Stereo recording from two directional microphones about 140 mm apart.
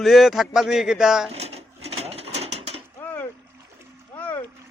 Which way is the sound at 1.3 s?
45° right (ahead or behind).